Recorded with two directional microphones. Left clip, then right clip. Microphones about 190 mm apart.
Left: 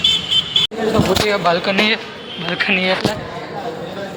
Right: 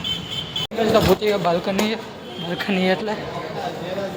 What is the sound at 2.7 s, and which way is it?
Speech, 45° right (ahead or behind).